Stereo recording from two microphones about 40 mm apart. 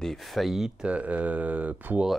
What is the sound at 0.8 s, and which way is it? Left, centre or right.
Speech, right.